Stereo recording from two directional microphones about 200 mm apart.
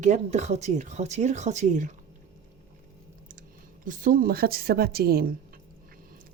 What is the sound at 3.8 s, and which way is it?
A woman's voice, 45° right (ahead or behind).